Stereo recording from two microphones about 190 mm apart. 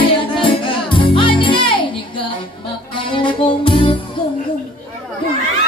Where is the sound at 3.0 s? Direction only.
25° left (ahead or behind).